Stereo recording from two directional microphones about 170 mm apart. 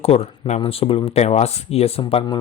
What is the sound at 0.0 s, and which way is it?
Speech, 35° left (ahead or behind).